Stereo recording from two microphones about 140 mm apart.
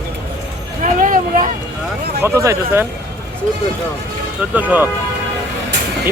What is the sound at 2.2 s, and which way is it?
Speech, 20° right (ahead or behind).